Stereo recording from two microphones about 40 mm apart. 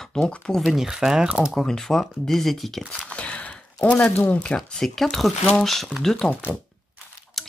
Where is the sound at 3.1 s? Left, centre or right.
Left.